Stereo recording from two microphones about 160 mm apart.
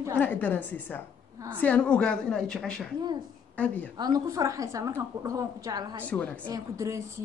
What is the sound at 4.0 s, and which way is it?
A woman's voice, 25° right (ahead or behind).